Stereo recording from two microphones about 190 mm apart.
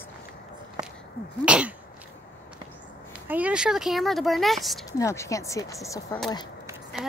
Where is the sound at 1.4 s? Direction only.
5° right (ahead or behind).